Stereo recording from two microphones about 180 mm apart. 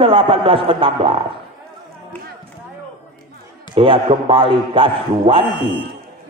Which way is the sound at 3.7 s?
30° right (ahead or behind).